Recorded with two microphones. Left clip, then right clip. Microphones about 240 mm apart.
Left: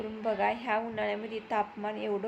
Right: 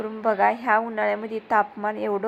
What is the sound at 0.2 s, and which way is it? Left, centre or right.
A woman's voice, centre.